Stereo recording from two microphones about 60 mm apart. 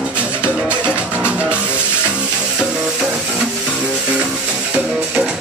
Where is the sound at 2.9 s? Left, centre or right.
Centre.